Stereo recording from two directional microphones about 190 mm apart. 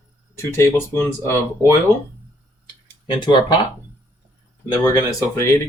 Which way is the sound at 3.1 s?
25° left (ahead or behind).